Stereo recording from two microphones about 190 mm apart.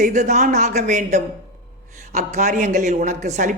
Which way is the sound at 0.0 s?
40° right (ahead or behind).